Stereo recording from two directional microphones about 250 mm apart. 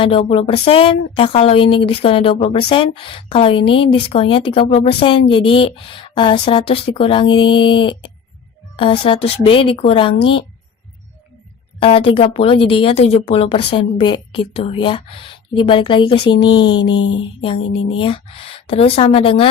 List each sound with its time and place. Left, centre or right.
0.0 s speech: left
11.8 s speech: left
16.5 s a sound: left
16.9 s speech: left
17.9 s speech: left